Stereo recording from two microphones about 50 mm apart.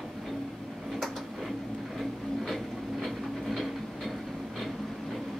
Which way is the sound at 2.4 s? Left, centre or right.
Centre.